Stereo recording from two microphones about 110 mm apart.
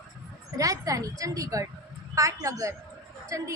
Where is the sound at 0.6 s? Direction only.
30° right (ahead or behind).